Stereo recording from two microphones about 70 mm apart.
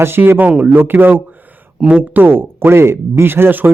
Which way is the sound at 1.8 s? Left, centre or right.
Centre.